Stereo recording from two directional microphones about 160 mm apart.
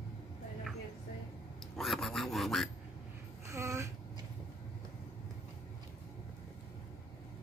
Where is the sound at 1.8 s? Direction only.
Centre (ahead or behind).